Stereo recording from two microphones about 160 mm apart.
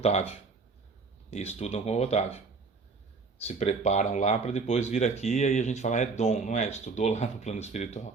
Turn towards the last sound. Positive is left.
turn(degrees=45)  # may be behind; listen again after turning